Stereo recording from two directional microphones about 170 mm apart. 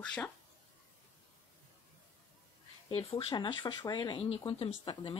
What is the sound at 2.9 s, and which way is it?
A woman's voice, 35° left (ahead or behind).